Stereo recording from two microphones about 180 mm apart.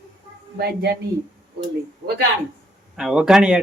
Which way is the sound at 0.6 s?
65° right (ahead or behind).